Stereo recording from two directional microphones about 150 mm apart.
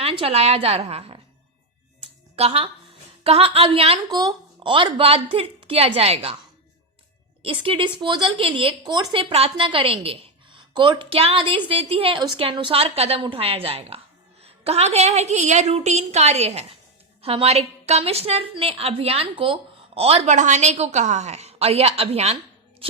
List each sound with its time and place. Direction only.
0.0 s a woman's voice: 40° right (ahead or behind)
2.3 s a woman's voice: 40° right (ahead or behind)
4.1 s a woman's voice: 25° right (ahead or behind)
7.4 s a woman's voice: 35° right (ahead or behind)